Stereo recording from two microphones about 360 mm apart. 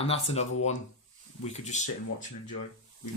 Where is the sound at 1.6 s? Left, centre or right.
Centre.